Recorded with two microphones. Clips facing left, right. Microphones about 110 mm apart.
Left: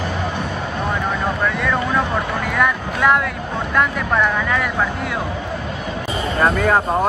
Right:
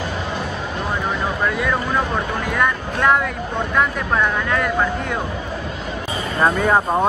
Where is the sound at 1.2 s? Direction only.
5° right (ahead or behind).